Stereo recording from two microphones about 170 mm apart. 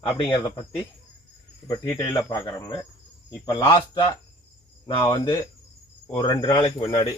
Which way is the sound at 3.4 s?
25° left (ahead or behind).